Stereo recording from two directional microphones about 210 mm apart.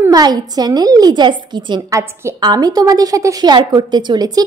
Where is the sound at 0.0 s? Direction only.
20° right (ahead or behind).